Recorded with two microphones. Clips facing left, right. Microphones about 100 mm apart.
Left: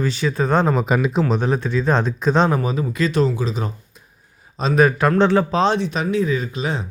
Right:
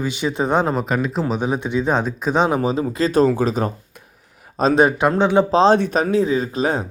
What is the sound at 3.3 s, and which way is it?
Speech, 50° right (ahead or behind).